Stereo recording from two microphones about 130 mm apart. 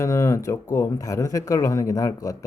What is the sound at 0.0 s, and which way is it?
Speech, 25° left (ahead or behind).